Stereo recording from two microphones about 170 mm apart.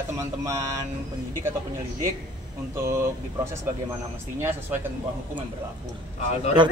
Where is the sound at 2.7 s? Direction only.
15° right (ahead or behind).